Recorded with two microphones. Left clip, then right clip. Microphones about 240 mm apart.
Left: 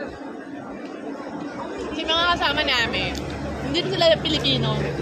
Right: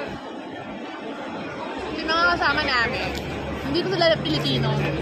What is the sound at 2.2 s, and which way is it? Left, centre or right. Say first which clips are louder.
A woman's voice: right 1 dB; centre.